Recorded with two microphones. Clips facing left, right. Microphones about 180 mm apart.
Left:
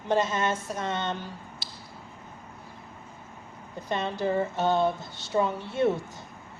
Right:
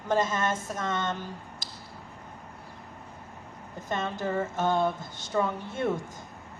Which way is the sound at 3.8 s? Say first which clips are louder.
Left 3 dB; 45° right (ahead or behind).